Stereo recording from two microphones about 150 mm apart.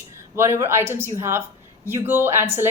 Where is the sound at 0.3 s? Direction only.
15° right (ahead or behind).